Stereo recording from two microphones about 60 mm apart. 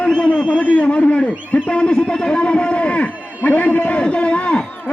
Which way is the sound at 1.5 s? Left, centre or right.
Centre.